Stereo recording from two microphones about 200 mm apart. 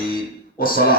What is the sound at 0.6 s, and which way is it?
Speech, 45° left (ahead or behind).